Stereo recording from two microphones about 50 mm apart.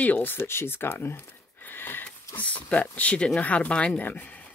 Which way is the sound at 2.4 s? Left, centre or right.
Left.